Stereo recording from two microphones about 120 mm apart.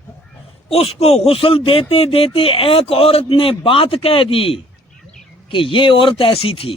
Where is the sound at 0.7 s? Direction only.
55° left (ahead or behind).